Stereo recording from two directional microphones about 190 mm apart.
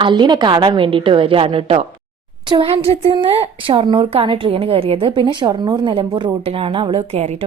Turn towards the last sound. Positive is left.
turn(degrees=-30)  # may be behind; listen again after turning